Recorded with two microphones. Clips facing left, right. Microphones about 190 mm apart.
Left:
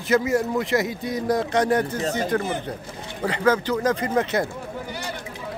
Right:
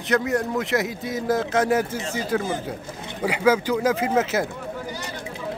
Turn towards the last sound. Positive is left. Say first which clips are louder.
# right 1 dB
turn(degrees=-5)  # may be behind; listen again after turning